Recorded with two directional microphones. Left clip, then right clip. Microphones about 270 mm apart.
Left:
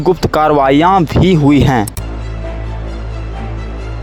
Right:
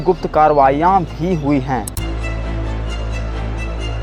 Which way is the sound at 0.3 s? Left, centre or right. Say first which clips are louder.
Left 1 dB; left.